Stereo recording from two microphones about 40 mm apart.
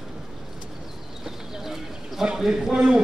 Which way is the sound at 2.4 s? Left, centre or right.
Centre.